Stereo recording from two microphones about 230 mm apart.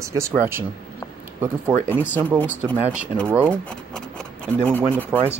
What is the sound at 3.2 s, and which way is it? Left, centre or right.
Speech, centre.